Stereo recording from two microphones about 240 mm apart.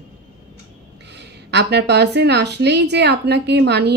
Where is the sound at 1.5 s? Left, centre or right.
Right.